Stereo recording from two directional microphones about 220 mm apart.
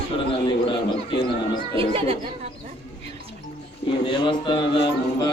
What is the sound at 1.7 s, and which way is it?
Speech, 25° right (ahead or behind).